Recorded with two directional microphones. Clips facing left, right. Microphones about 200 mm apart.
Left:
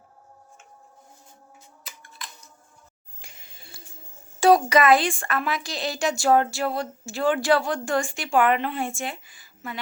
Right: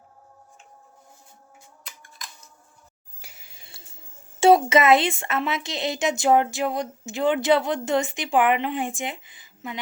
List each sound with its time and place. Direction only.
1.9 s scissors: 5° left (ahead or behind)
3.2 s a sound: 10° right (ahead or behind)
4.4 s speech: 25° right (ahead or behind)